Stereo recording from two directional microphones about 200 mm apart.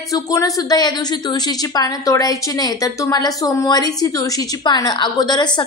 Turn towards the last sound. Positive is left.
turn(degrees=20)  # may be behind; listen again after turning